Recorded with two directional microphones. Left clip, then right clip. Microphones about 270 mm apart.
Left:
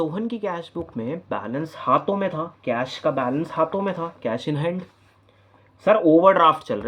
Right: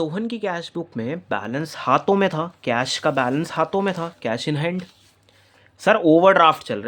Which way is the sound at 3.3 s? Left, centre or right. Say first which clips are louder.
Right 1 dB; centre.